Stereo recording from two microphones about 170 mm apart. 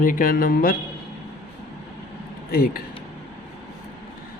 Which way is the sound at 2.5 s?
60° left (ahead or behind).